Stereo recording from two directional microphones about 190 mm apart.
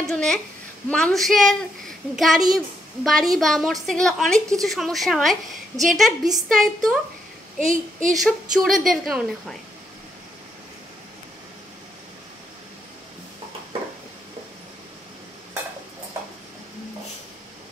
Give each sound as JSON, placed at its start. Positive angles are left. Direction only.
{"t": 0.0, "sound": "a woman's voice", "side_deg": 5}
{"t": 7.6, "sound": "a woman's voice", "side_deg": -45}
{"t": 8.1, "sound": "a woman's voice", "side_deg": 0}